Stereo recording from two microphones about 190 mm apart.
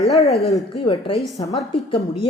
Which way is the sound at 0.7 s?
25° left (ahead or behind).